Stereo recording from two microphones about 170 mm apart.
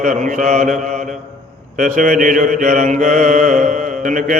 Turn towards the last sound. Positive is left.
turn(degrees=-50)  # may be behind; listen again after turning